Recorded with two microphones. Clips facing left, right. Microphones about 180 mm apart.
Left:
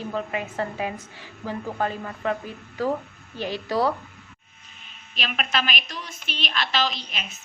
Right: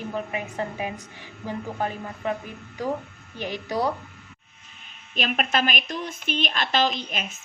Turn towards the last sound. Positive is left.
turn(degrees=-50)  # may be behind; listen again after turning